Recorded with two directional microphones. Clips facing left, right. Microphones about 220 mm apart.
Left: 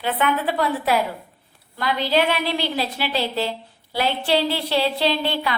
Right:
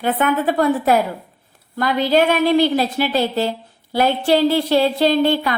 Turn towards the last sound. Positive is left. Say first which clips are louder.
# right 7 dB
turn(degrees=-45)  # may be behind; listen again after turning